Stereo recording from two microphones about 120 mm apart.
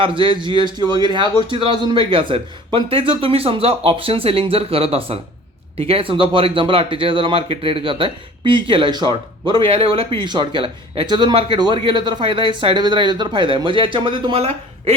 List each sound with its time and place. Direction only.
0.0 s speech: 45° right (ahead or behind)